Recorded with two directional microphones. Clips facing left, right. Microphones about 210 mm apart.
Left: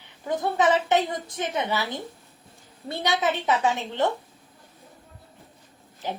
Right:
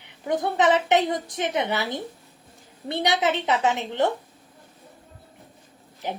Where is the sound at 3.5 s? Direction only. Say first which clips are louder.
Right 1 dB; 20° right (ahead or behind).